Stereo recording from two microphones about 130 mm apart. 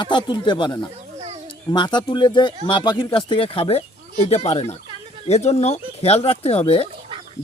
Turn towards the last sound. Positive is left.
turn(degrees=50)  # may be behind; listen again after turning